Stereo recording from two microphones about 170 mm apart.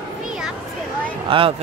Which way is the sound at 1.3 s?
30° right (ahead or behind).